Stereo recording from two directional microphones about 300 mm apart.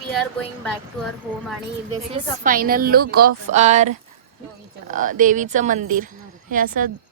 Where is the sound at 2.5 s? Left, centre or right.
Right.